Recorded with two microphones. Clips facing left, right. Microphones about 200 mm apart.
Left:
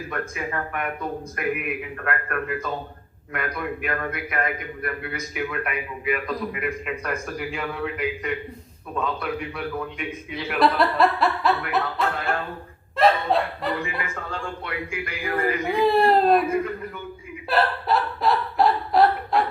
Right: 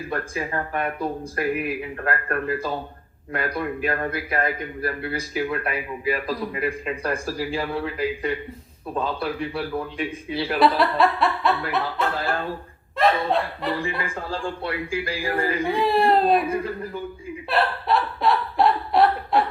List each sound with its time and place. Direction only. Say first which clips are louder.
0.1 s a man's voice: right 2 dB; 30° right (ahead or behind)
10.6 s chuckle: even; centre (ahead or behind)
12.1 s a man's voice: right 1 dB; 30° right (ahead or behind)
13.0 s snicker: left 1 dB; centre (ahead or behind)
14.0 s a man's voice: right 3 dB; 30° right (ahead or behind)
15.8 s chuckle: left 2 dB; centre (ahead or behind)
16.5 s a man's voice: left 1 dB; 30° right (ahead or behind)
17.5 s hiccup: even; centre (ahead or behind)